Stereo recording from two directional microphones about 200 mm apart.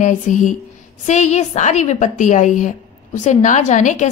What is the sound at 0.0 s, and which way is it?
Speech, 40° left (ahead or behind).